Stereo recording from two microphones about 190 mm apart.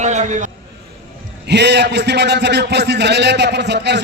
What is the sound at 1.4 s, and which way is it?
A man's voice, 65° right (ahead or behind).